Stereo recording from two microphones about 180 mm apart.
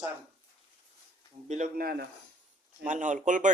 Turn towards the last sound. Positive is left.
turn(degrees=-45)  # may be behind; listen again after turning